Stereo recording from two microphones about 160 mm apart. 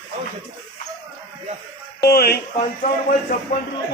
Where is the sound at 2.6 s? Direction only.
55° left (ahead or behind).